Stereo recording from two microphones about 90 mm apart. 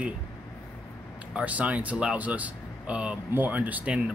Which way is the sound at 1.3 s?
15° right (ahead or behind).